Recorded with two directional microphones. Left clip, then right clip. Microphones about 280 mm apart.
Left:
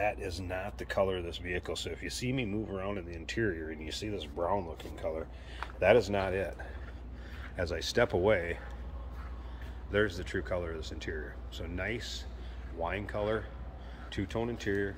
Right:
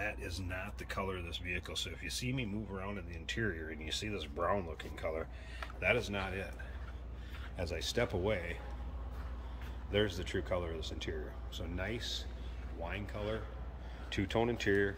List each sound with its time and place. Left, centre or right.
0.0 s speech: centre
5.8 s speech: left
7.5 s speech: centre
9.8 s speech: centre
14.1 s speech: centre